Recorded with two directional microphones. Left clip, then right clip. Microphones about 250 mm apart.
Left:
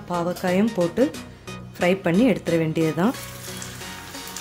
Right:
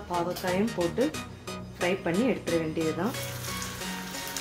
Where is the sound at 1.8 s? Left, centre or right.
Left.